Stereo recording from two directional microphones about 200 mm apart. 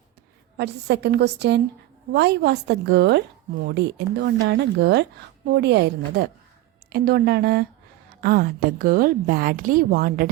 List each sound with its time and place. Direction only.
0.5 s a woman's voice: 55° right (ahead or behind)